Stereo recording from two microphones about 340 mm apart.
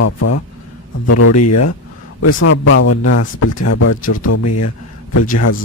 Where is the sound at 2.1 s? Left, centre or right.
Left.